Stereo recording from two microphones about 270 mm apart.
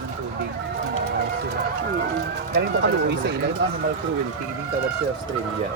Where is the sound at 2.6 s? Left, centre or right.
Right.